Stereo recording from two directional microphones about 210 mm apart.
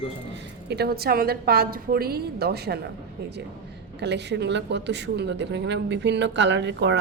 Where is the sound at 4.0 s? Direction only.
55° right (ahead or behind).